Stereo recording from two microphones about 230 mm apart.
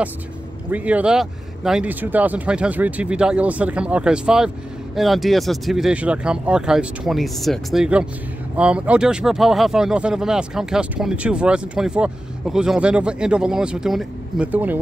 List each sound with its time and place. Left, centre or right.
0.7 s speech: centre